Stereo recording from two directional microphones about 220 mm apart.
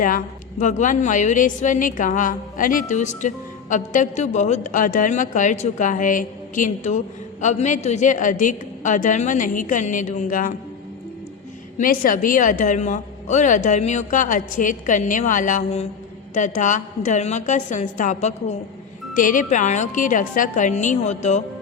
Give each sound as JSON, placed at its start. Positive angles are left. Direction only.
{"t": 0.6, "sound": "a woman's voice", "side_deg": 35}
{"t": 11.8, "sound": "a woman's voice", "side_deg": 40}